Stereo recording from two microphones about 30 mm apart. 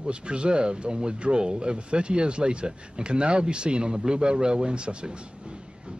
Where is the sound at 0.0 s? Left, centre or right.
Right.